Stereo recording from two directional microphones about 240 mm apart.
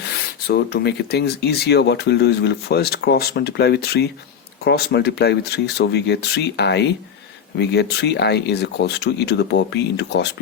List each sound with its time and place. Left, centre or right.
0.4 s speech: left